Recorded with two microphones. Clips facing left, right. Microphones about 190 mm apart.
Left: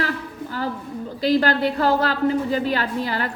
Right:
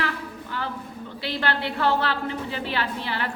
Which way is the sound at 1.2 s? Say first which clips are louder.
Left 9 dB; 40° left (ahead or behind).